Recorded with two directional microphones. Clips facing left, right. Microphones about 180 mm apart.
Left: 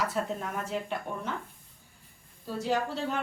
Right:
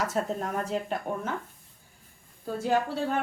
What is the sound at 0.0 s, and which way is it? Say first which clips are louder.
A woman's voice: right 2 dB; 45° right (ahead or behind).